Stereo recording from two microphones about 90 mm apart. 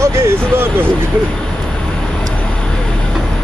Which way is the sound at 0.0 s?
30° right (ahead or behind).